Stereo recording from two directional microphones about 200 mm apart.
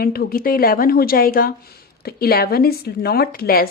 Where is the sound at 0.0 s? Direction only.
50° left (ahead or behind).